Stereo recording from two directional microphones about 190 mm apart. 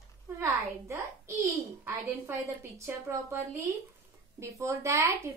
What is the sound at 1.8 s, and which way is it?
A woman's voice, 15° right (ahead or behind).